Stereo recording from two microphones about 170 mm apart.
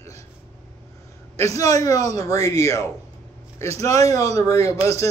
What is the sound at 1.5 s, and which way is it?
Speech, 20° left (ahead or behind).